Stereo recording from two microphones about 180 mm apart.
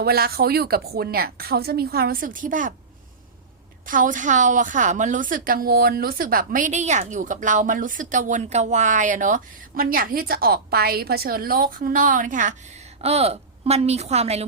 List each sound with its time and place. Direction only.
0.0 s a woman's voice: 60° right (ahead or behind)
3.8 s a woman's voice: 45° right (ahead or behind)